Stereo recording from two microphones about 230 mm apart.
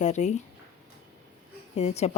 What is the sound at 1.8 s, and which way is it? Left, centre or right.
Speech, left.